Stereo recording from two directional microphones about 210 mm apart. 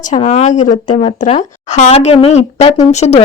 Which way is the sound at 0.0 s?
35° left (ahead or behind).